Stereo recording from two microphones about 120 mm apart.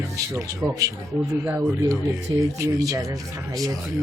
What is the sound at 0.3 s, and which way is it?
Speech, 25° right (ahead or behind).